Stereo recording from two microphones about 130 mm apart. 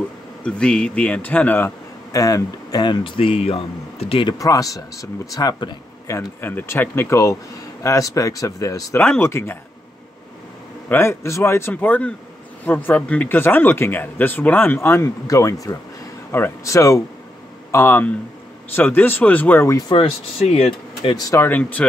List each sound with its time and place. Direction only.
0.4 s speech: 5° left (ahead or behind)
2.1 s speech: 25° left (ahead or behind); by 4.4 s 45° left (ahead or behind)
4.4 s speech: 25° left (ahead or behind)
10.9 s speech: 20° left (ahead or behind)
19.9 s speech: 45° left (ahead or behind)
21.1 s speech: 30° left (ahead or behind)
21.5 s speech: 10° left (ahead or behind)